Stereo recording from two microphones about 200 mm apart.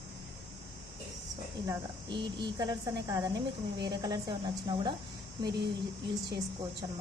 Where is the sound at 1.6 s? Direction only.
20° right (ahead or behind).